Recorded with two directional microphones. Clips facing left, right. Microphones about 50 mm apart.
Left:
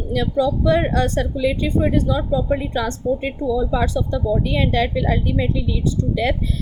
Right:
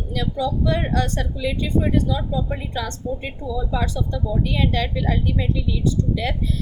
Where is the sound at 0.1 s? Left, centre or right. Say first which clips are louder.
Left 5 dB; left.